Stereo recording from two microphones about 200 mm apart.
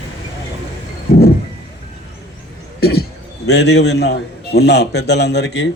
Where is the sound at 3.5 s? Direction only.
60° left (ahead or behind).